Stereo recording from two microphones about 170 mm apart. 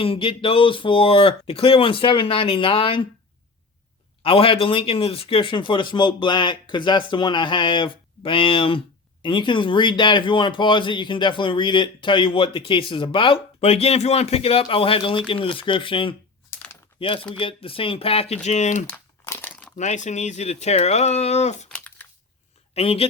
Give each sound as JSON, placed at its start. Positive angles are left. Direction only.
{"t": 0.0, "sound": "speech", "side_deg": 30}
{"t": 4.2, "sound": "speech", "side_deg": 30}
{"t": 17.4, "sound": "speech", "side_deg": 30}
{"t": 18.9, "sound": "crumpling", "side_deg": 10}
{"t": 19.8, "sound": "speech", "side_deg": 45}
{"t": 22.7, "sound": "speech", "side_deg": 35}